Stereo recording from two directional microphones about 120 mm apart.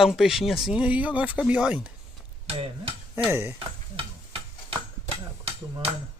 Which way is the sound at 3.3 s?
20° right (ahead or behind).